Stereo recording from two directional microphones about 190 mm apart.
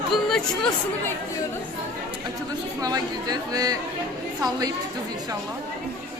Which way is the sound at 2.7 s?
20° right (ahead or behind).